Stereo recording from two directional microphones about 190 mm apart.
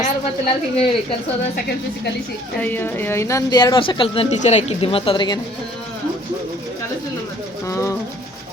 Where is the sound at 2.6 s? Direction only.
10° left (ahead or behind).